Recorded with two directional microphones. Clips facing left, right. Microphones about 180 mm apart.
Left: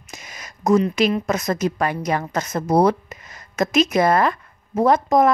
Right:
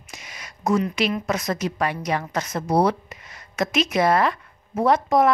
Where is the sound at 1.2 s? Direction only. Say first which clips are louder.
Left 3 dB; 45° left (ahead or behind).